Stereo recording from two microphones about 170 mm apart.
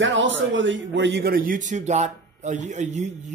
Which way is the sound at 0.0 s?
90° right.